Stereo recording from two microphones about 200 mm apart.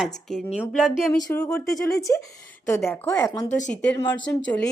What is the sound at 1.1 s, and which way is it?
A woman's voice, 10° left (ahead or behind).